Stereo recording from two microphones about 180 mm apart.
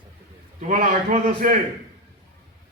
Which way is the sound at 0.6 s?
45° right (ahead or behind).